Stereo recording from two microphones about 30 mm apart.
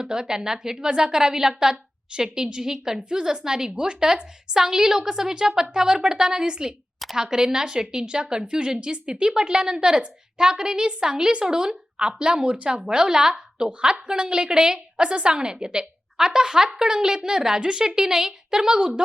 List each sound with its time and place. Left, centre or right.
0.0 s a woman's voice: right
4.5 s a woman's voice: centre; by 11.4 s right
11.4 s a woman's voice: right